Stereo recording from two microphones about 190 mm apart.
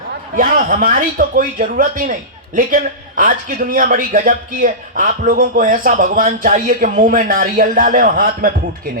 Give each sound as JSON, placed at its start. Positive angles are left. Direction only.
{"t": 0.3, "sound": "a man's voice", "side_deg": -45}
{"t": 3.2, "sound": "a man's voice", "side_deg": -45}